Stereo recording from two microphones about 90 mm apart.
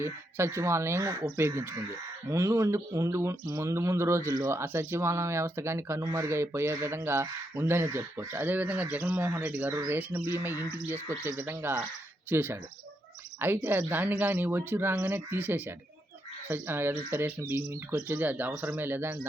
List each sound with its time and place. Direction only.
0.0 s speech: 30° right (ahead or behind)
13.6 s speech: 20° right (ahead or behind)